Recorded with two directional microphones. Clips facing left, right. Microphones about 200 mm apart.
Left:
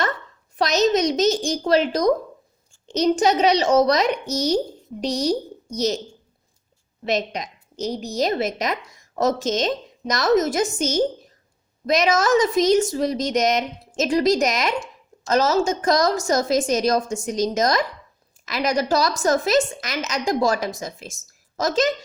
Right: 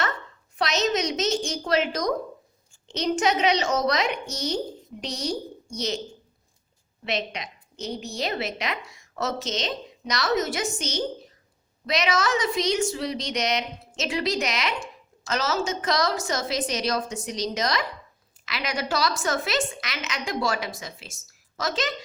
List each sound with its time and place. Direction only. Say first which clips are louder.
0.5 s a woman's voice: left 6 dB; 40° left (ahead or behind)
7.0 s a woman's voice: left 6 dB; 40° left (ahead or behind)